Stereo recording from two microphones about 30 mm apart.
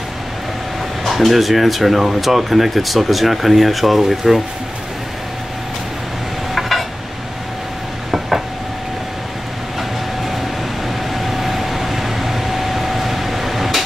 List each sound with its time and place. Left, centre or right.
1.0 s speech: centre
11.1 s vehicle: centre